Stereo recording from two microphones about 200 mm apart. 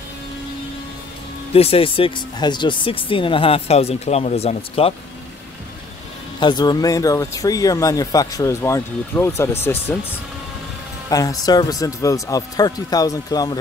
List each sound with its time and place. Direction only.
1.5 s speech: 30° left (ahead or behind)
6.4 s speech: 20° left (ahead or behind)
11.1 s speech: 15° left (ahead or behind)